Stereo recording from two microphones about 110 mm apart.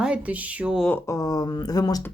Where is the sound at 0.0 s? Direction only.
10° right (ahead or behind).